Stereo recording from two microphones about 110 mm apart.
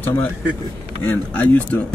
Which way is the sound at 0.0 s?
15° left (ahead or behind).